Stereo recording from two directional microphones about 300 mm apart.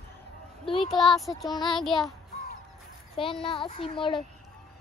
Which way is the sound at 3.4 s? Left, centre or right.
Centre.